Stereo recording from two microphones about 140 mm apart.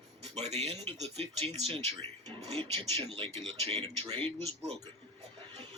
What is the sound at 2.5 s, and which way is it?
Speech, 45° right (ahead or behind).